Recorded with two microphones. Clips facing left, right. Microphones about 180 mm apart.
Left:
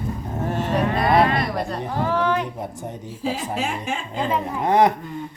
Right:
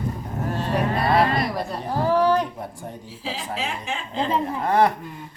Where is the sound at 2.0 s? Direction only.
35° right (ahead or behind).